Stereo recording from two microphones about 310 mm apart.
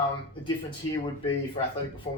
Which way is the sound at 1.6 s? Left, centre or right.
Centre.